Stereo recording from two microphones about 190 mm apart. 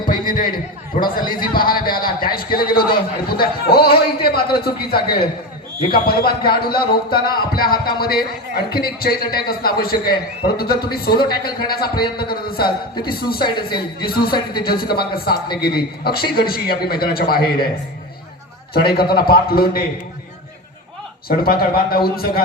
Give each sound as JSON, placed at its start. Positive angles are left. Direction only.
{"t": 0.1, "sound": "a man's voice", "side_deg": 45}
{"t": 4.9, "sound": "a man's voice", "side_deg": 25}
{"t": 5.9, "sound": "a man's voice", "side_deg": 55}
{"t": 18.7, "sound": "a man's voice", "side_deg": 55}
{"t": 21.2, "sound": "a man's voice", "side_deg": 50}